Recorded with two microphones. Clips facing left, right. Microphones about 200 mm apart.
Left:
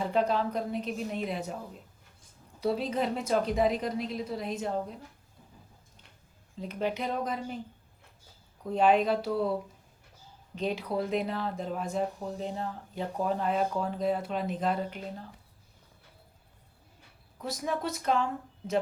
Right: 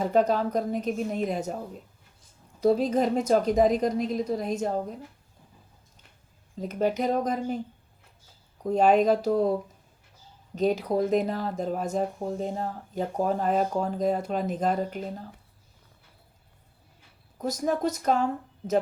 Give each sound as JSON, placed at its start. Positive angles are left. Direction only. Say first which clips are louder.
{"t": 0.0, "sound": "speech", "louder": "right 4 dB", "side_deg": -45}
{"t": 6.6, "sound": "speech", "louder": "right 6 dB", "side_deg": -45}
{"t": 8.6, "sound": "speech", "louder": "right 4 dB", "side_deg": -45}
{"t": 17.3, "sound": "speech", "louder": "right 6 dB", "side_deg": -45}